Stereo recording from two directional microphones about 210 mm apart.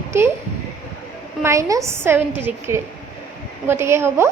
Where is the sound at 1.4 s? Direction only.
15° right (ahead or behind).